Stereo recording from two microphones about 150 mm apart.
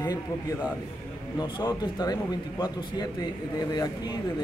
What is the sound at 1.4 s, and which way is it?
Speech, 25° left (ahead or behind).